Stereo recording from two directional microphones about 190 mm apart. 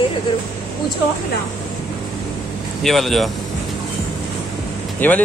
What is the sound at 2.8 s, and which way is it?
Speech, centre (ahead or behind).